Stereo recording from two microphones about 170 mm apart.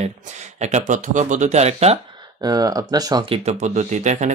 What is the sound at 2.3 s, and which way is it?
Speech, 20° right (ahead or behind).